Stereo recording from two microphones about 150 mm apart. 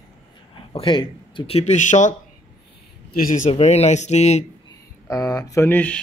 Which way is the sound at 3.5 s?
45° left (ahead or behind).